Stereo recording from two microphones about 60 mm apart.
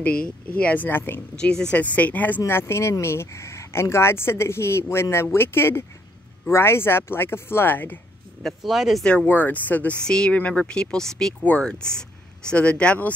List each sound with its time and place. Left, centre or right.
0.2 s speech: left
1.3 s speech: centre
2.4 s speech: left
8.4 s speech: centre
8.7 s speech: centre
9.0 s speech: left
10.0 s speech: centre